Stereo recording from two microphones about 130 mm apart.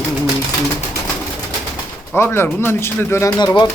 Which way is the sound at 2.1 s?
20° left (ahead or behind).